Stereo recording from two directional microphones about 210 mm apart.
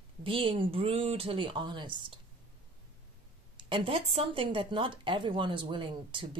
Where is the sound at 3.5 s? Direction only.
25° right (ahead or behind).